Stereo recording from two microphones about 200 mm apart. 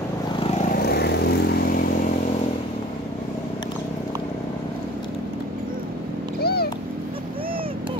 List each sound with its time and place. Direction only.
0.7 s vehicle: 50° left (ahead or behind)
6.4 s cat: 50° left (ahead or behind)